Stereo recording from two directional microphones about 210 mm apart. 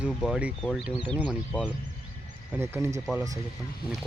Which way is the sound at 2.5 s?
10° right (ahead or behind).